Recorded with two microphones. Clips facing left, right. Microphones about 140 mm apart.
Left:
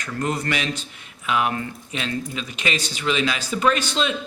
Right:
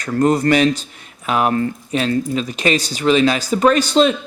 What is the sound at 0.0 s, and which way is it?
Speech, 40° right (ahead or behind).